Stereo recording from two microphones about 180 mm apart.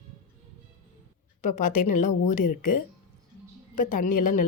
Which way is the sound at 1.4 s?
45° left (ahead or behind).